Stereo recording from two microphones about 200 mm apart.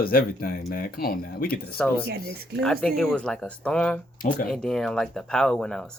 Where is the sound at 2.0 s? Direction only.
50° right (ahead or behind).